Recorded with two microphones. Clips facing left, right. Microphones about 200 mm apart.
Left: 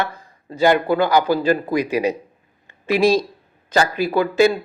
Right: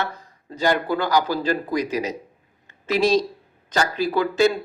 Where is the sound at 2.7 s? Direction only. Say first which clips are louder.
Left 3 dB; 15° left (ahead or behind).